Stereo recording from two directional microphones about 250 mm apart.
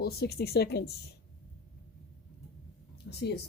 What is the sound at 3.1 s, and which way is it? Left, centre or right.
Speech, left.